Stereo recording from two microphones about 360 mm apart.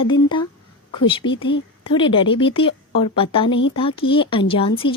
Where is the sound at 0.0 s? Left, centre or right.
Centre.